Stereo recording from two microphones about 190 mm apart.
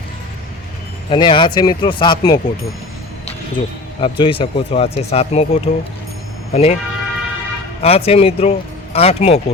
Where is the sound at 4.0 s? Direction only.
25° left (ahead or behind).